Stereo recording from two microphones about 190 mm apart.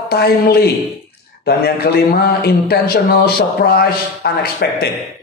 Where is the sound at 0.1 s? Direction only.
55° left (ahead or behind).